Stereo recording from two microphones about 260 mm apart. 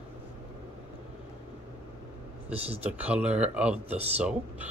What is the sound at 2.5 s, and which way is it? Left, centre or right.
Speech, right.